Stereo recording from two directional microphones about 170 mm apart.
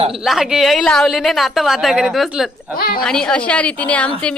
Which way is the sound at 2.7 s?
60° left (ahead or behind).